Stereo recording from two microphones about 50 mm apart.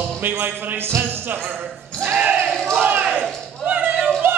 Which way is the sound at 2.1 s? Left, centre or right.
Right.